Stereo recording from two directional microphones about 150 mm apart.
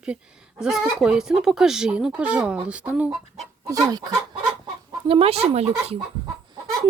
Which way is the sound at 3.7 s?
25° right (ahead or behind).